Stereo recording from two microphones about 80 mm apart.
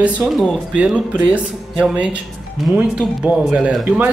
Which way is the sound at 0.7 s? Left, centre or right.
Centre.